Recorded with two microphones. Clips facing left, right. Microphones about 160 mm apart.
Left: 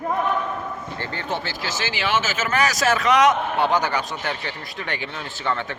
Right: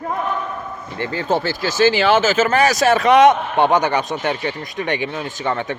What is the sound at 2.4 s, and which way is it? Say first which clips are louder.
A man's voice: right 6 dB; 30° right (ahead or behind).